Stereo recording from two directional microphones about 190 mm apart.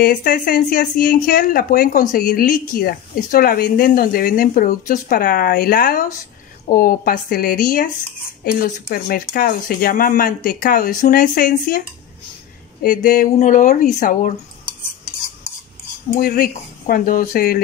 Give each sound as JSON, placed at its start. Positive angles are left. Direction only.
{"t": 0.0, "sound": "speech", "side_deg": 50}
{"t": 12.8, "sound": "speech", "side_deg": 50}
{"t": 16.2, "sound": "speech", "side_deg": 50}